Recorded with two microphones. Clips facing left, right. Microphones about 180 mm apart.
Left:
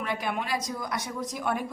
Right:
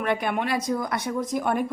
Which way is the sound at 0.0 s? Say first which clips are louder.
Right 6 dB; 60° right (ahead or behind).